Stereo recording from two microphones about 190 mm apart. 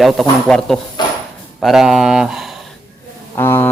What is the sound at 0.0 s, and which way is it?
Speech, centre (ahead or behind).